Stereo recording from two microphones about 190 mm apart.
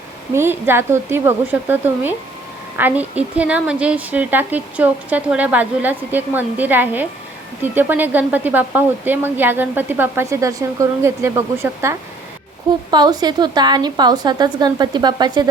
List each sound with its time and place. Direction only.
0.3 s a woman's voice: 10° right (ahead or behind)